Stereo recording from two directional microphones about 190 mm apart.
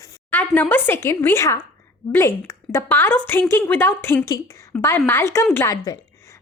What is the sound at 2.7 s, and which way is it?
Speech, 10° left (ahead or behind).